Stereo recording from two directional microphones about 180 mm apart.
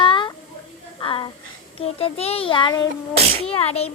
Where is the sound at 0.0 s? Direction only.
25° left (ahead or behind).